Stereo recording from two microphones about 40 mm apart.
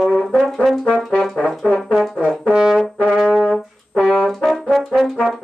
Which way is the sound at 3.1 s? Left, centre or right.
Centre.